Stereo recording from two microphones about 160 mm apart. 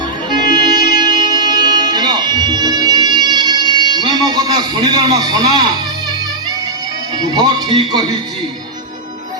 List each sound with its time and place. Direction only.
0.3 s music: 25° right (ahead or behind)
7.2 s a man's voice: 25° right (ahead or behind)